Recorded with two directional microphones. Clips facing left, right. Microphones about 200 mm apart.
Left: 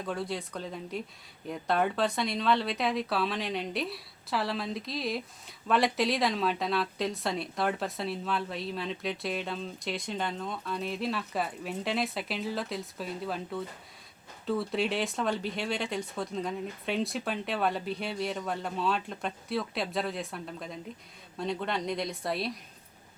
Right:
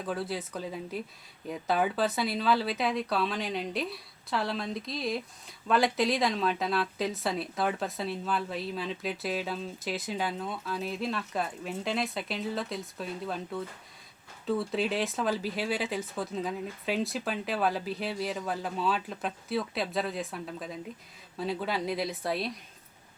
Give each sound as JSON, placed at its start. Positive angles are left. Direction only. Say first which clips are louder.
{"t": 0.0, "sound": "speech", "louder": "right 1 dB", "side_deg": -5}